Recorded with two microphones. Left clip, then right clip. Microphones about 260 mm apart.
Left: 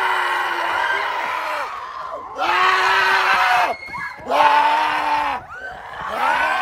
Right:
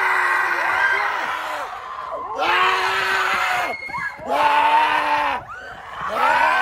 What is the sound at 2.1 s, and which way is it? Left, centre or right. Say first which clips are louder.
Screaming: even; centre.